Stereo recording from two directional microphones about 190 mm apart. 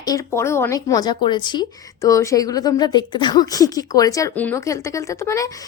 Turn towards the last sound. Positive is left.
turn(degrees=15)  # may be behind; listen again after turning